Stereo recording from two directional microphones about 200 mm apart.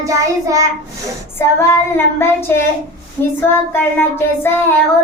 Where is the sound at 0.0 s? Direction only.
15° right (ahead or behind).